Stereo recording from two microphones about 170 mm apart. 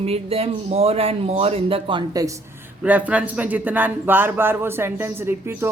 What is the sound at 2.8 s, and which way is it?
Speech, 10° right (ahead or behind).